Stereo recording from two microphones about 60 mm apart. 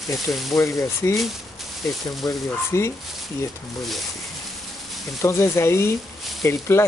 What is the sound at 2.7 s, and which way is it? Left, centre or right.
Speech, left.